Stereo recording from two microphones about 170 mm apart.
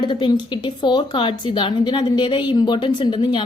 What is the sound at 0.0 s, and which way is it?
A woman's voice, 30° left (ahead or behind).